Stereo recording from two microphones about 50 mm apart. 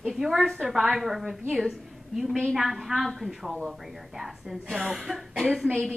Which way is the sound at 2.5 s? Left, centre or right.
Centre.